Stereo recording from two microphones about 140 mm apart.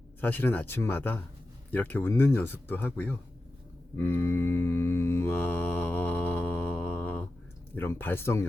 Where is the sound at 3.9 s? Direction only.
15° left (ahead or behind).